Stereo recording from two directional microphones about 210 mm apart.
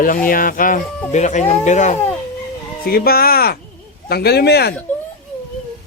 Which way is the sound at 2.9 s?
45° left (ahead or behind).